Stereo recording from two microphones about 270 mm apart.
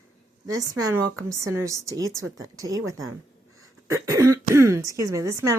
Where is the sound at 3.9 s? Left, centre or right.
Centre.